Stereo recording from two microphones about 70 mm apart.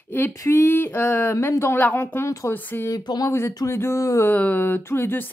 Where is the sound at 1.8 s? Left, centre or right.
Left.